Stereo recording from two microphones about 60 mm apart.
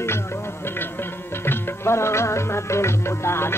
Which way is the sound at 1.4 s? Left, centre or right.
Left.